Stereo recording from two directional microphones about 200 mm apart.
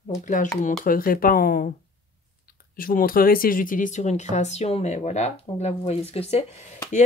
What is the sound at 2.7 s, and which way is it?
Speech, 45° left (ahead or behind).